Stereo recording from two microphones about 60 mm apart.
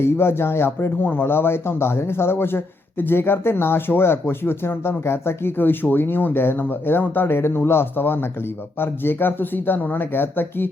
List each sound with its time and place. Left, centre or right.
0.0 s speech: left